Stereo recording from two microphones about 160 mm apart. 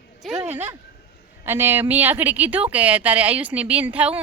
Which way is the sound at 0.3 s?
15° right (ahead or behind).